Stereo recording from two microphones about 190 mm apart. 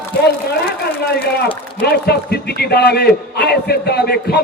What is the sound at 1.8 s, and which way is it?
A man's voice, 55° left (ahead or behind).